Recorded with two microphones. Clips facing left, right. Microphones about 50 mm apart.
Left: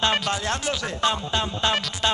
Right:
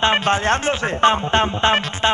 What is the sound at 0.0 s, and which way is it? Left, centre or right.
Music, right.